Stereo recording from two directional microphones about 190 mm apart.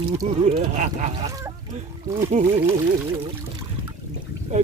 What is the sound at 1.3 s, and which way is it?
Speech, 15° right (ahead or behind).